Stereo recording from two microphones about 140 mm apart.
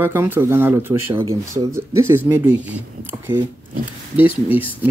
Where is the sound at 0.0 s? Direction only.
15° right (ahead or behind).